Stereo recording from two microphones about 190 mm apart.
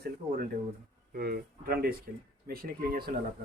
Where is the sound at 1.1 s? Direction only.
55° right (ahead or behind).